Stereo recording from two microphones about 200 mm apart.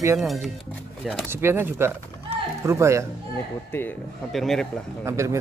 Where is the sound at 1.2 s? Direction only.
10° right (ahead or behind).